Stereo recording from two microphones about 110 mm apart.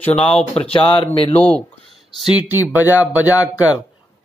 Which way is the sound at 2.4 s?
15° right (ahead or behind).